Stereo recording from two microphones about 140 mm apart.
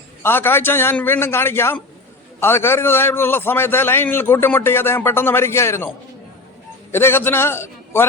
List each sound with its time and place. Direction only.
0.2 s a man's voice: 15° left (ahead or behind)
6.9 s a man's voice: 15° left (ahead or behind)